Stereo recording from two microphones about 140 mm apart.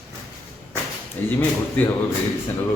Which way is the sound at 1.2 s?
10° left (ahead or behind).